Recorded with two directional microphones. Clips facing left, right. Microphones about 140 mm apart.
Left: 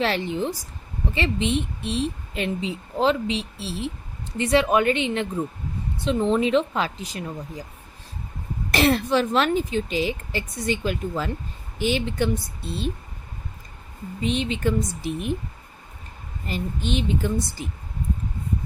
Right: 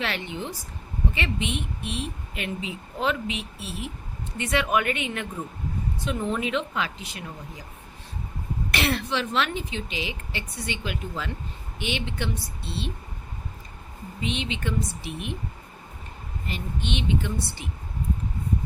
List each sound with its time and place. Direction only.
0.0 s speech: 35° left (ahead or behind)
8.7 s speech: 35° left (ahead or behind)
14.2 s speech: 40° left (ahead or behind)
16.5 s speech: 40° left (ahead or behind)